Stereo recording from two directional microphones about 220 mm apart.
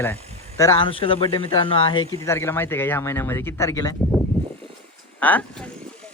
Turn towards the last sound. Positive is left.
turn(degrees=5)  # may be behind; listen again after turning